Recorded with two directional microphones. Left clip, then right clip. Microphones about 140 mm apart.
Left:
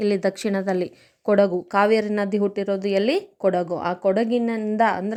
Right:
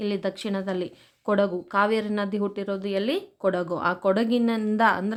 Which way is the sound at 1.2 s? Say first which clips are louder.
Left 5 dB; 25° left (ahead or behind).